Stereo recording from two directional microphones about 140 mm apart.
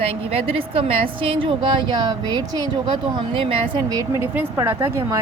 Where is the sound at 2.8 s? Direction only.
35° right (ahead or behind).